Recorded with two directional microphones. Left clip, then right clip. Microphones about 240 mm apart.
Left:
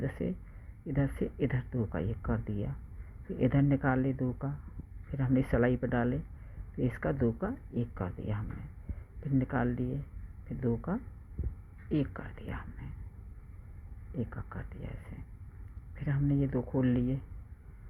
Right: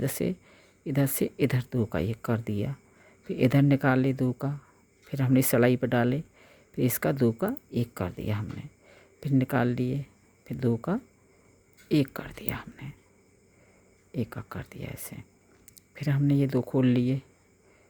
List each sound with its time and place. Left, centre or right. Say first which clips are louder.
0.0 s speech: right 6 dB; right
14.1 s speech: right 6 dB; right